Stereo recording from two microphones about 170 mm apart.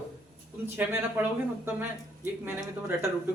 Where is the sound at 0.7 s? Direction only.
10° right (ahead or behind).